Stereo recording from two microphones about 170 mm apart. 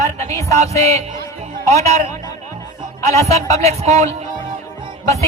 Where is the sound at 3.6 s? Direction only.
40° right (ahead or behind).